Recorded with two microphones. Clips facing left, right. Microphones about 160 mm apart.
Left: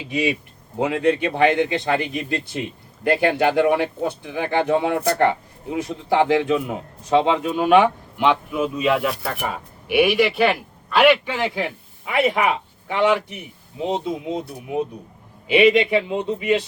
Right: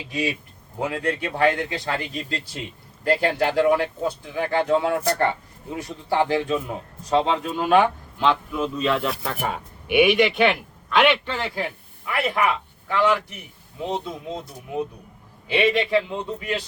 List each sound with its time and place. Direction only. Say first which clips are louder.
0.1 s speech: left 4 dB; 20° left (ahead or behind)
9.0 s a man's voice: left 2 dB; centre (ahead or behind); by 14.4 s 20° left (ahead or behind)
15.4 s speech: left 6 dB; 20° left (ahead or behind)